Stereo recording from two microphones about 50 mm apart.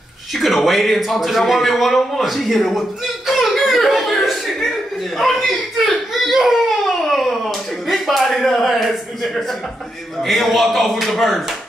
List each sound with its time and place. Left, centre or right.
0.3 s a man's voice: centre
3.3 s a sound: centre
5.1 s speech: centre
7.1 s a sound: centre
7.8 s slap: centre
8.2 s a man's voice: centre